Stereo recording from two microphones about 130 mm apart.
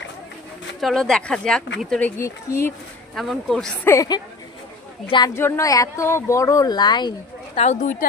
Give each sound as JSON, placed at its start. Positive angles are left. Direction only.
{"t": 0.8, "sound": "speech", "side_deg": 0}
{"t": 3.2, "sound": "speech", "side_deg": 0}
{"t": 3.8, "sound": "speech", "side_deg": 25}
{"t": 5.0, "sound": "a woman's voice", "side_deg": 35}
{"t": 5.3, "sound": "speech", "side_deg": 20}
{"t": 7.5, "sound": "speech", "side_deg": 60}